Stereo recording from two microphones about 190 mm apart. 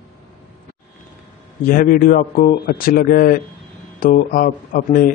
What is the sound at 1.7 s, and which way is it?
A man's voice, 45° left (ahead or behind).